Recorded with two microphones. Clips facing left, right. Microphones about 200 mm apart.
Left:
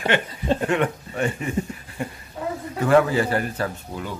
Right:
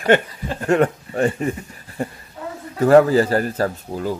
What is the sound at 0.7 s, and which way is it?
A man's voice, 40° right (ahead or behind).